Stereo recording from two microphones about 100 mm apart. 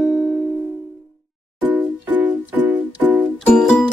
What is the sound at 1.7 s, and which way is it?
Music, 20° right (ahead or behind).